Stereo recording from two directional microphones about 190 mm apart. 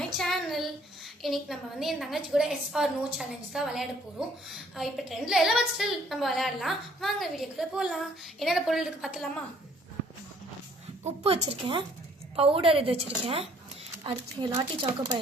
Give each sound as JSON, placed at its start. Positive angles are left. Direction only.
{"t": 0.0, "sound": "child singing", "side_deg": 0}
{"t": 1.2, "sound": "a woman's voice", "side_deg": 0}
{"t": 11.0, "sound": "a woman's voice", "side_deg": -35}